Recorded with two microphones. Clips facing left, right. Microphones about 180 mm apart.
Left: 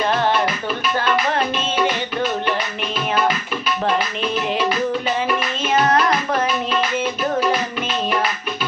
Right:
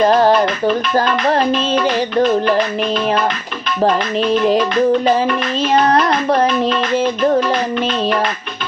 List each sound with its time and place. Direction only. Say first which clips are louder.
0.0 s music: right 7 dB; 40° right (ahead or behind)
3.8 s music: right 8 dB; 35° right (ahead or behind)
5.7 s music: right 3 dB; 35° right (ahead or behind)